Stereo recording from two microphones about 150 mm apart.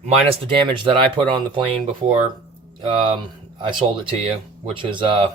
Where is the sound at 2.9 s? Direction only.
35° right (ahead or behind).